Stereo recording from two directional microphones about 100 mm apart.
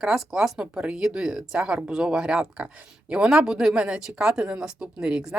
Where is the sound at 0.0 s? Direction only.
5° right (ahead or behind).